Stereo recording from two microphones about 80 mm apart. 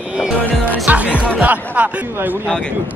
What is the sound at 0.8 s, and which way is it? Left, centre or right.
Speech, centre.